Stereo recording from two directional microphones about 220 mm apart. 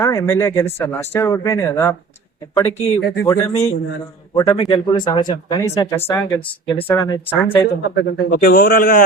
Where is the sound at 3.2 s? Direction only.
20° left (ahead or behind).